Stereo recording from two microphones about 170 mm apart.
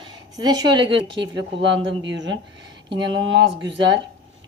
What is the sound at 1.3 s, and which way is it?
Speech, 90° right.